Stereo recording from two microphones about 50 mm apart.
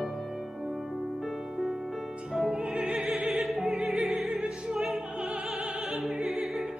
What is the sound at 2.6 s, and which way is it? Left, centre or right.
Opera, centre.